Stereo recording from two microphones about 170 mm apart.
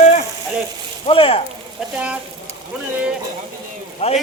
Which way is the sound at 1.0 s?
35° left (ahead or behind).